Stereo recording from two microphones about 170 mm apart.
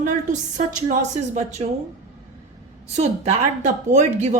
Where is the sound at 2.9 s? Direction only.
40° right (ahead or behind).